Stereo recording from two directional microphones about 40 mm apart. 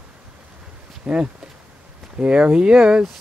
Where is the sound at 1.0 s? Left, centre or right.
Right.